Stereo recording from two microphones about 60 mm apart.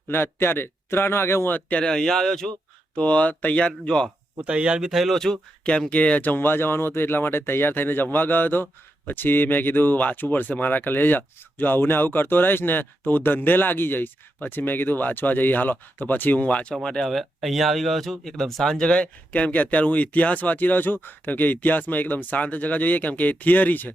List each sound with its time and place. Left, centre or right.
0.1 s speech: left
1.5 s speech: left
1.8 s speech: centre
2.9 s speech: left
3.7 s speech: centre
4.4 s speech: centre
5.1 s speech: centre
5.9 s speech: left
16.7 s speech: centre; by 23.9 s left